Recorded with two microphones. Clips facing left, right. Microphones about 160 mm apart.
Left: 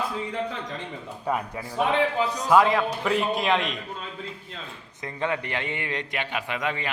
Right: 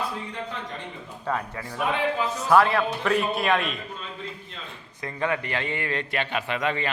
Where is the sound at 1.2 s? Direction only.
15° left (ahead or behind).